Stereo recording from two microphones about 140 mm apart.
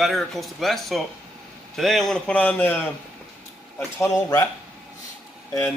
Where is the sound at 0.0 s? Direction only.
Centre (ahead or behind).